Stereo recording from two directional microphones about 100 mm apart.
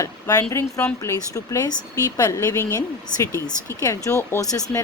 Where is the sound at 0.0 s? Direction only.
35° left (ahead or behind).